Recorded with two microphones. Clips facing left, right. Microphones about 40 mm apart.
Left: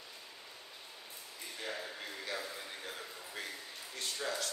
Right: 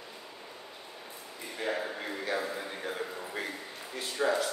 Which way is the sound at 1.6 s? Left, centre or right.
Right.